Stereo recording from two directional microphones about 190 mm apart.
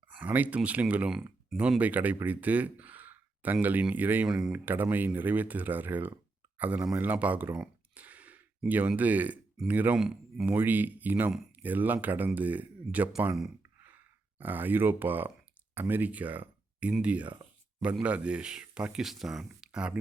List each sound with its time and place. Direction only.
0.2 s speech: 10° right (ahead or behind)
13.6 s a sound: 10° right (ahead or behind)
15.7 s speech: 10° right (ahead or behind)